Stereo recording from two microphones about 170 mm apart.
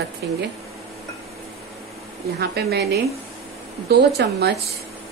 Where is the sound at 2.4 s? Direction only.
65° right (ahead or behind).